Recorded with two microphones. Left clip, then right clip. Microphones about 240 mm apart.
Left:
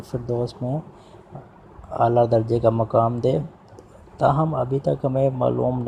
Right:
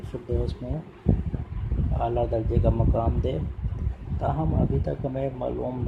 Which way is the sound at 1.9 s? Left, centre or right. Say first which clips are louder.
Left 9 dB; left.